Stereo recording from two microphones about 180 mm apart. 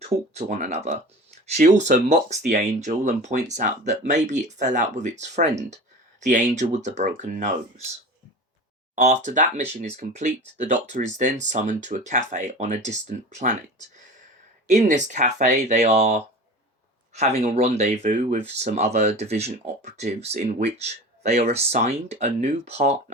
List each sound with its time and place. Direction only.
0.3 s speech: 40° right (ahead or behind)
1.8 s speech: 40° right (ahead or behind)
9.0 s speech: 45° right (ahead or behind)
17.4 s speech: 35° right (ahead or behind)